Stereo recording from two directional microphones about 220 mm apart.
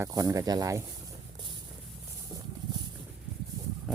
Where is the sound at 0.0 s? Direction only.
15° right (ahead or behind).